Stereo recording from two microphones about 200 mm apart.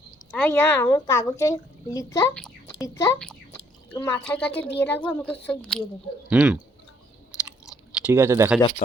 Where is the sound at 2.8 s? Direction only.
15° left (ahead or behind).